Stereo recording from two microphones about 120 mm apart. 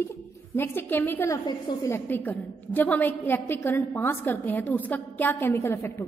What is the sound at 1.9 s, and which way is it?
A woman's voice, 15° left (ahead or behind).